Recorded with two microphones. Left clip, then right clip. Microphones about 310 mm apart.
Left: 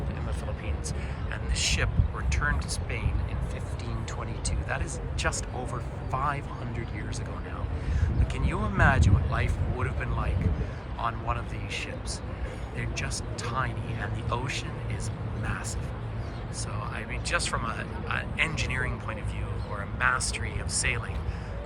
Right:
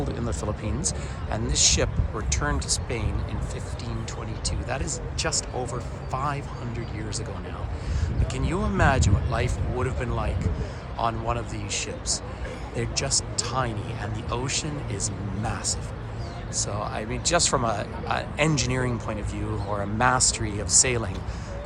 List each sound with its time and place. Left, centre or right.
0.8 s speech: centre
4.4 s speech: centre
8.3 s speech: centre
16.6 s speech: centre